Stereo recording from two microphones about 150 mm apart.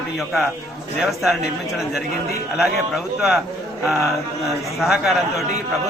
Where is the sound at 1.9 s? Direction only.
90° left.